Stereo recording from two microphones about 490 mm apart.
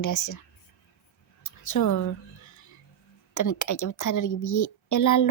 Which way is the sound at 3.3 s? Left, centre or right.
Left.